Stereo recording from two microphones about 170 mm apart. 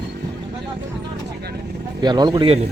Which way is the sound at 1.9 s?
25° right (ahead or behind).